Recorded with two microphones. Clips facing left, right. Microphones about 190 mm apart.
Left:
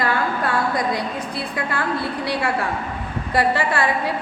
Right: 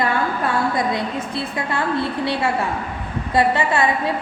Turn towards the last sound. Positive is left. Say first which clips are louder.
# right 2 dB
turn(degrees=-20)  # may be behind; listen again after turning